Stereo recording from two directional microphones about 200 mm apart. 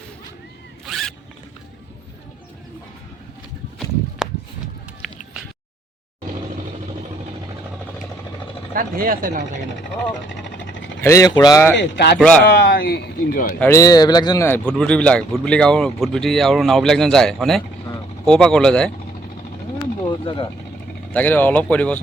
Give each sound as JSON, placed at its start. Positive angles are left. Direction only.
{"t": 0.9, "sound": "zipper", "side_deg": 0}
{"t": 5.0, "sound": "a sound", "side_deg": 0}
{"t": 8.7, "sound": "speech", "side_deg": -45}
{"t": 11.0, "sound": "speech", "side_deg": 15}
{"t": 11.8, "sound": "speech", "side_deg": 60}
{"t": 13.6, "sound": "speech", "side_deg": 15}
{"t": 20.1, "sound": "speech", "side_deg": 25}
{"t": 21.1, "sound": "speech", "side_deg": 10}